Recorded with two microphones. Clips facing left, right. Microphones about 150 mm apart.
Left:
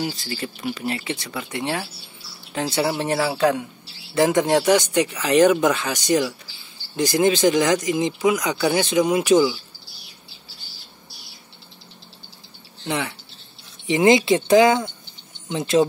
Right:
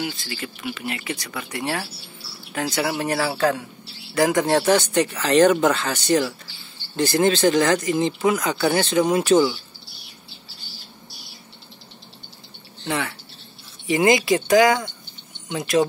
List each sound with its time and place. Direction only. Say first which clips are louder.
0.0 s speech: left 2 dB; 40° left (ahead or behind); by 9.6 s 10° left (ahead or behind)
12.8 s speech: even; 20° left (ahead or behind)